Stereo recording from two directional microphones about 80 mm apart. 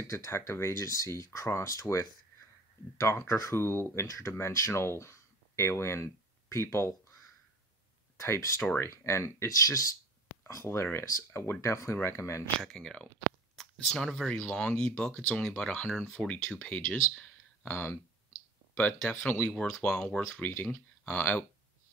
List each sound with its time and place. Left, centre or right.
0.0 s speech: left
8.2 s speech: left
11.9 s speech: left
12.5 s speech: centre
17.2 s a sound: left
18.8 s speech: centre
19.5 s speech: centre
21.0 s speech: left